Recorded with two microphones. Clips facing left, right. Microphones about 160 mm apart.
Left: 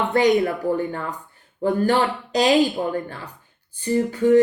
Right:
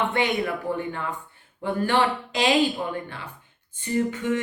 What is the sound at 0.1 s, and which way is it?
A woman's voice, 40° left (ahead or behind).